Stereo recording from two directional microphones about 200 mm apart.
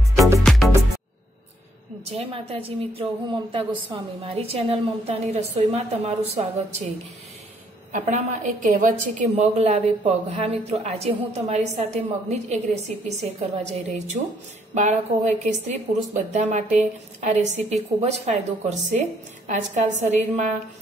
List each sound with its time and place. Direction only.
0.4 s music: centre (ahead or behind)
2.0 s a woman's voice: 30° right (ahead or behind)
7.9 s a woman's voice: 35° right (ahead or behind)